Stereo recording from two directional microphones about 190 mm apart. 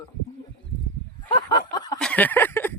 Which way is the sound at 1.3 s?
20° left (ahead or behind).